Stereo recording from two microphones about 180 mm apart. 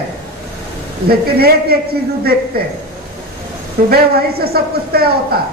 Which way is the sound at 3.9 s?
60° right (ahead or behind).